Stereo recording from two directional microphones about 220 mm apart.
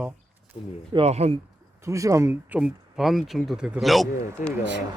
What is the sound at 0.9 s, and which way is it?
Speech, 30° right (ahead or behind).